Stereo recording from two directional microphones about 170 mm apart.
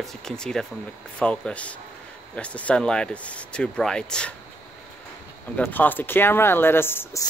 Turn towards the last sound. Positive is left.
turn(degrees=15)  # may be behind; listen again after turning